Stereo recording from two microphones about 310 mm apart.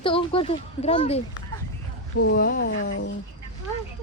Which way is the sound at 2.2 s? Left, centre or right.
Left.